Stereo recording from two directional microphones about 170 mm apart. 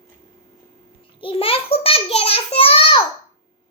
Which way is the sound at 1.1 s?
30° left (ahead or behind).